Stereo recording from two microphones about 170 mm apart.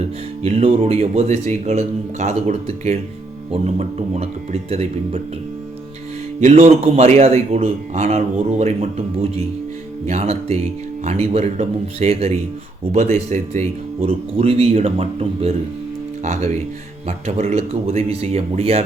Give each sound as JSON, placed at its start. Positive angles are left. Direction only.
{"t": 0.0, "sound": "a man's voice", "side_deg": -35}
{"t": 6.4, "sound": "a man's voice", "side_deg": -45}